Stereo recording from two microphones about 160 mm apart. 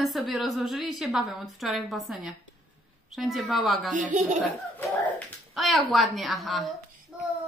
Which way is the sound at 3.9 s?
50° right (ahead or behind).